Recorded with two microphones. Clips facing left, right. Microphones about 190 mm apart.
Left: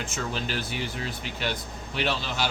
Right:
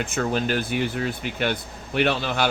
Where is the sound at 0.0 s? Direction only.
55° right (ahead or behind).